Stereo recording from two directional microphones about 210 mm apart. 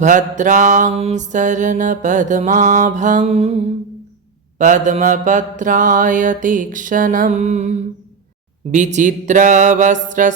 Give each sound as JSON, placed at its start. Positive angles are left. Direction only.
{"t": 0.0, "sound": "mantra", "side_deg": -35}